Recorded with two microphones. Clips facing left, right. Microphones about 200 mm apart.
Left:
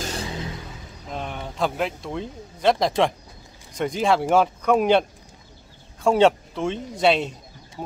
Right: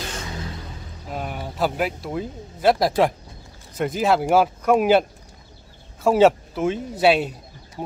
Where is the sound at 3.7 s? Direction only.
5° right (ahead or behind).